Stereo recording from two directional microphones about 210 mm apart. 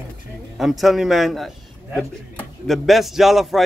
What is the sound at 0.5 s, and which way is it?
A man's voice, centre (ahead or behind).